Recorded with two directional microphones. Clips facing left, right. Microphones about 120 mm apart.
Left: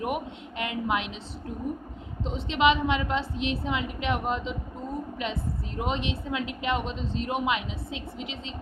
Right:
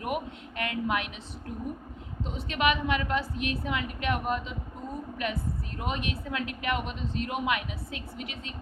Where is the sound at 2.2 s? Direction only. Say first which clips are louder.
Left 4 dB; 25° left (ahead or behind).